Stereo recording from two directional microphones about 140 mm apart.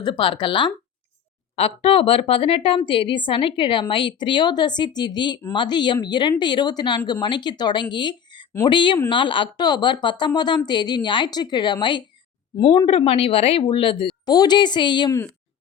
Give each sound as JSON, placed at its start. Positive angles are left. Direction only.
{"t": 0.0, "sound": "a woman's voice", "side_deg": 35}